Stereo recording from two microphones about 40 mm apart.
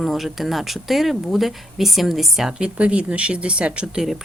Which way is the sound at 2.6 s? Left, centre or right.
Right.